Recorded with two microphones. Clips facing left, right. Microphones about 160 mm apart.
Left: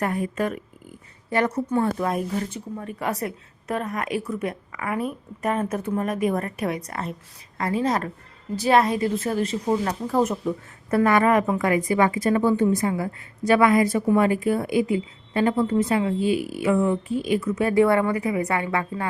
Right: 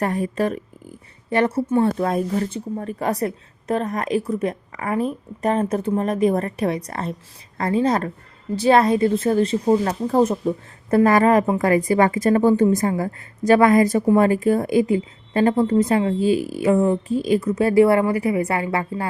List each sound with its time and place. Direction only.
0.0 s a woman's voice: 35° right (ahead or behind)